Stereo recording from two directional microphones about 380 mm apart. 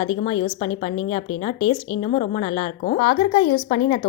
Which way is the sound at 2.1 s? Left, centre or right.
Centre.